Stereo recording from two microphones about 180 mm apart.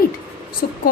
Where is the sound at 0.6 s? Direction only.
50° left (ahead or behind).